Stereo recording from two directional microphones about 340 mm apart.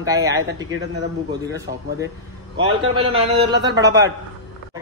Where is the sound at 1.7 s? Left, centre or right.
Right.